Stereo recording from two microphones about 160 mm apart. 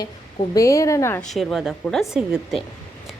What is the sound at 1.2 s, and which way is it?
Speech, centre (ahead or behind).